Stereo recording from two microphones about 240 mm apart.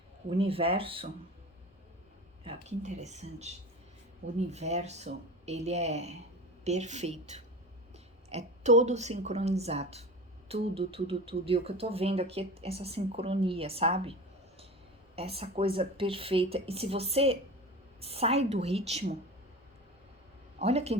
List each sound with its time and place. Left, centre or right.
0.3 s speech: right
2.4 s a woman's voice: right
20.6 s speech: right